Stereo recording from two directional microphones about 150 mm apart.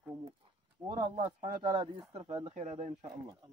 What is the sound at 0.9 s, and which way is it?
Speech, 30° right (ahead or behind).